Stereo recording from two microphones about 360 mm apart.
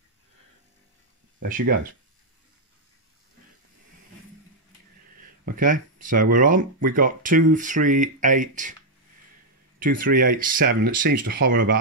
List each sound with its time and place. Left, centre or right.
5.4 s speech: right
9.8 s speech: right